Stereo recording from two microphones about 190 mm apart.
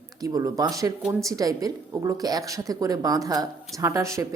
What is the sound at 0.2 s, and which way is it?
A woman's voice, 20° right (ahead or behind).